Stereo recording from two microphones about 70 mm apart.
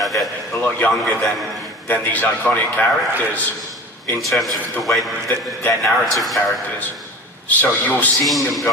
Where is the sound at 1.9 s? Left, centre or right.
Left.